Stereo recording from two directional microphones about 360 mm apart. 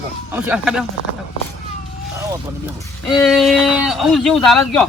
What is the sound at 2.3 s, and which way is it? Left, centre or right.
Speech, centre.